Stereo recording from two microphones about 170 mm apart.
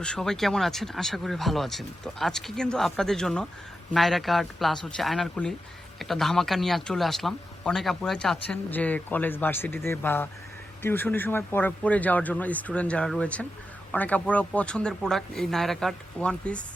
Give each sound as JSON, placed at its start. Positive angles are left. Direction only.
{"t": 0.0, "sound": "a man's voice", "side_deg": 5}